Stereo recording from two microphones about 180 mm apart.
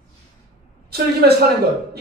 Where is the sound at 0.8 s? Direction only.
60° right (ahead or behind).